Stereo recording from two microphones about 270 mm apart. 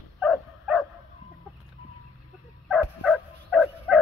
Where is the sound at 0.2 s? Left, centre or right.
Centre.